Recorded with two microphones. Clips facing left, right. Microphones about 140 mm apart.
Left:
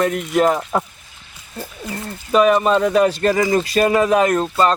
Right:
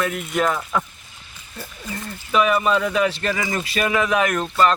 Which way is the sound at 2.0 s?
40° left (ahead or behind).